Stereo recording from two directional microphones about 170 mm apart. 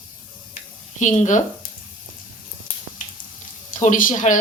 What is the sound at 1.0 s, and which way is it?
Speech, 45° left (ahead or behind).